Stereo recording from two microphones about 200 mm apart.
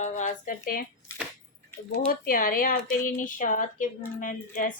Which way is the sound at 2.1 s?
45° left (ahead or behind).